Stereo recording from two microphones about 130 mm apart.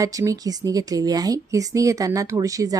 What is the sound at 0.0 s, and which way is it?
A woman's voice, 25° right (ahead or behind).